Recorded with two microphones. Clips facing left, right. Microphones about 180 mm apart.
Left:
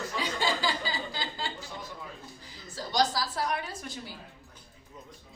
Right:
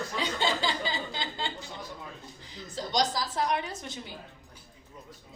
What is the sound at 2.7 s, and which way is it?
A woman's voice, 20° right (ahead or behind).